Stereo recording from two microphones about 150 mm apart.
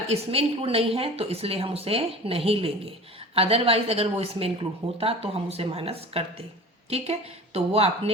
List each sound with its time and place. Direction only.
0.1 s a woman's voice: 40° right (ahead or behind)